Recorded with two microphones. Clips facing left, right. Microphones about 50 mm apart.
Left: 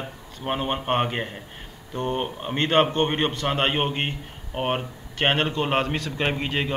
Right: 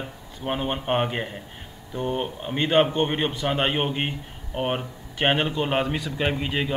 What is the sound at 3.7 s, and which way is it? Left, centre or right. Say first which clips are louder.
A man's voice: even; centre.